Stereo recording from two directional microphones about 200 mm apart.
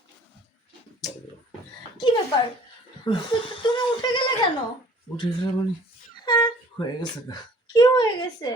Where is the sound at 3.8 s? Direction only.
20° left (ahead or behind).